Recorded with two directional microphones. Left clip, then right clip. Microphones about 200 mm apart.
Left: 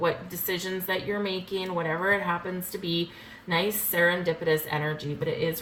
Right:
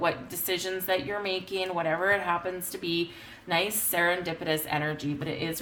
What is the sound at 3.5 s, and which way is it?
A woman's voice, 50° right (ahead or behind).